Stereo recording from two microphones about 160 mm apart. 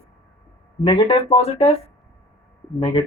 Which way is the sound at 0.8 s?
30° left (ahead or behind).